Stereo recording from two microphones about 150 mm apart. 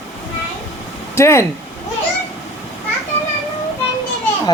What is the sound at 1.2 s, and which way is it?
Speech, 20° left (ahead or behind).